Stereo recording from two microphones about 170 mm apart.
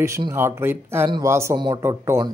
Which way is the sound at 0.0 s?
15° right (ahead or behind).